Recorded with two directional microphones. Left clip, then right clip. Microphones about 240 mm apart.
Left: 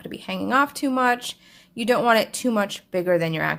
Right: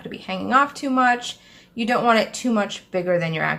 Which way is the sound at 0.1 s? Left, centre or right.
Left.